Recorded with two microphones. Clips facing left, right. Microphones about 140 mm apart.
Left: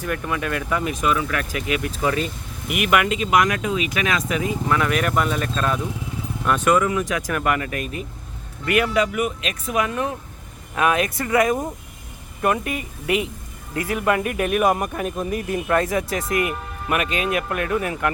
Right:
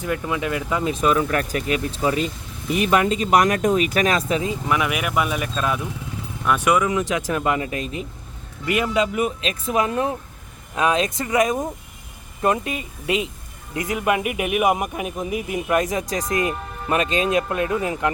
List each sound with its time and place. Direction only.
0.0 s speech: 20° right (ahead or behind)
1.0 s speech: 40° right (ahead or behind)
4.7 s speech: 10° right (ahead or behind)